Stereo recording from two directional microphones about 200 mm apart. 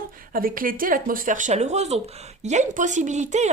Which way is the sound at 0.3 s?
45° right (ahead or behind).